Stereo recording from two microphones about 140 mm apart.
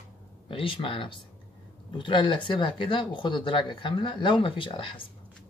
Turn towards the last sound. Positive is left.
turn(degrees=35)  # may be behind; listen again after turning